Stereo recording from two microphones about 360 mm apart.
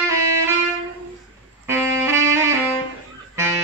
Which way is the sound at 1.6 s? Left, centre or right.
Centre.